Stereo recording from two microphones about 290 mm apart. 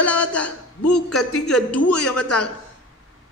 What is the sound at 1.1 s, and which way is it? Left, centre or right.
Speech, left.